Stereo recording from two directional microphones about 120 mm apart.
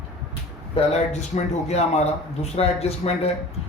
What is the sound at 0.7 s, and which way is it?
A man's voice, 60° left (ahead or behind).